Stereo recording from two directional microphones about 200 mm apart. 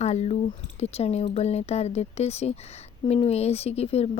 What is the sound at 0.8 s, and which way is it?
Speech, 30° left (ahead or behind).